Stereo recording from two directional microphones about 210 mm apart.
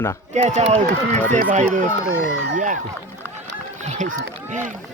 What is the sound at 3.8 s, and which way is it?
Run, 35° right (ahead or behind).